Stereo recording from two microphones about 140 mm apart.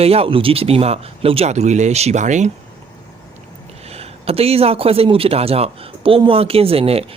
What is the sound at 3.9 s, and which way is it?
Speech, 45° right (ahead or behind).